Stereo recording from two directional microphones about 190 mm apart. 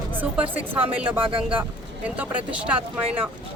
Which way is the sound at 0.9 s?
10° right (ahead or behind).